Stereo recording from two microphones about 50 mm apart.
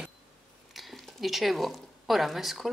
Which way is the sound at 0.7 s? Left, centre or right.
Centre.